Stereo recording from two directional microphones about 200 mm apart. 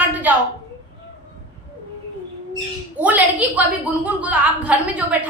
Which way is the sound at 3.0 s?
5° right (ahead or behind).